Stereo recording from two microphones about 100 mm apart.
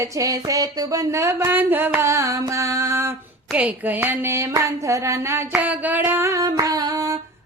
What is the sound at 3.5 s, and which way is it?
Speech, 15° right (ahead or behind).